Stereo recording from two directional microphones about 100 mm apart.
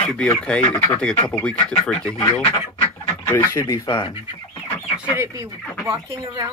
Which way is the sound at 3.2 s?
20° left (ahead or behind).